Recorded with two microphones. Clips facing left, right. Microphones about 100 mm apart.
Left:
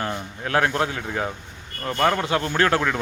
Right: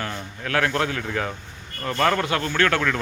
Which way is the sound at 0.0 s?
25° left (ahead or behind).